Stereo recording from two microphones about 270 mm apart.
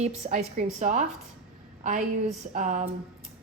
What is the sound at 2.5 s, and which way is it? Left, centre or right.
Speech, right.